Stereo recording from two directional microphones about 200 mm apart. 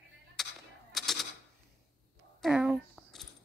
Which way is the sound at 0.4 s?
Centre (ahead or behind).